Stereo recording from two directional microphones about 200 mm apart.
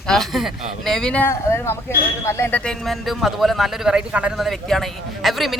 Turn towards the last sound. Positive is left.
turn(degrees=0)  # may be behind; listen again after turning